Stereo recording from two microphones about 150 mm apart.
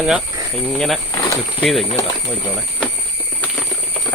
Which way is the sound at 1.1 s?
25° left (ahead or behind).